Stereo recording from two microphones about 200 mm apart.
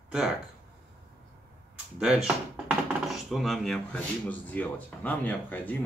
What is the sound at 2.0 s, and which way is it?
A man's voice, centre (ahead or behind).